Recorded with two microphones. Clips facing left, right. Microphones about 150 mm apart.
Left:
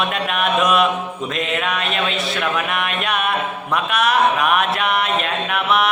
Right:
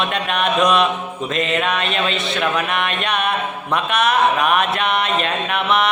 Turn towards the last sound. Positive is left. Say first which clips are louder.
# even
turn(degrees=0)  # may be behind; listen again after turning